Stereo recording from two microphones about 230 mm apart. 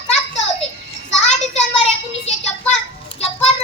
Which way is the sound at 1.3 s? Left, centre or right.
Left.